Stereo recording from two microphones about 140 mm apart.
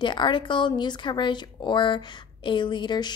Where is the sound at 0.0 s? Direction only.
35° left (ahead or behind).